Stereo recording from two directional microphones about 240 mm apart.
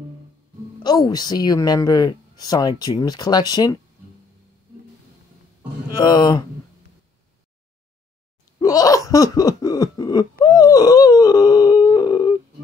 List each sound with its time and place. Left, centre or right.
0.8 s speech: centre
5.9 s speech: centre
8.5 s throat clearing: centre
10.4 s a sound: centre